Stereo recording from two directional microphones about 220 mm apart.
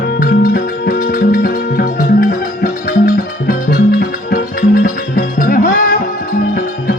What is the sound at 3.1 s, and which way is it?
Music, 40° left (ahead or behind).